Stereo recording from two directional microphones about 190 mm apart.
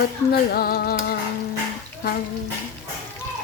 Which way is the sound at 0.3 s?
55° left (ahead or behind).